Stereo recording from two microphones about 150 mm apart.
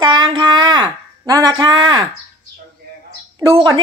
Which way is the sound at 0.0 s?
30° right (ahead or behind).